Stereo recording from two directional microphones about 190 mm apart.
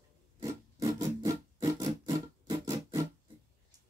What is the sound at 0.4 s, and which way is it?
Music, 15° right (ahead or behind).